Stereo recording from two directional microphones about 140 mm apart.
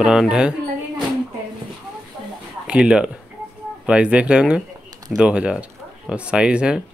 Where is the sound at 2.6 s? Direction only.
5° right (ahead or behind).